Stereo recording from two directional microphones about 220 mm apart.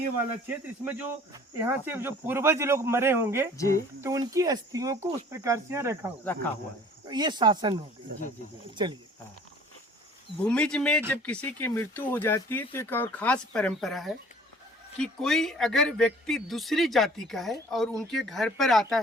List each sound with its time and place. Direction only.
0.4 s cricket: 10° right (ahead or behind)
7.1 s speech: 20° right (ahead or behind)
10.4 s a man's voice: 5° left (ahead or behind)